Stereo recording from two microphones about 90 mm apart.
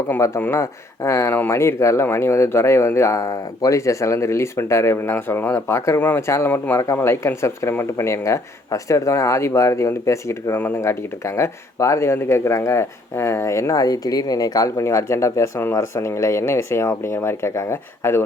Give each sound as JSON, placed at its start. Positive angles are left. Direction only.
{"t": 0.5, "sound": "speech", "side_deg": 35}